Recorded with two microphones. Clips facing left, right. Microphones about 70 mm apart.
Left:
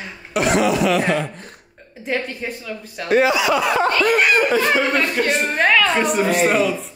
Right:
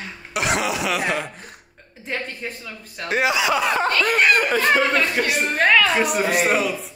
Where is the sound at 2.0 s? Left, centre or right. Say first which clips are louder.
Left 5 dB; centre.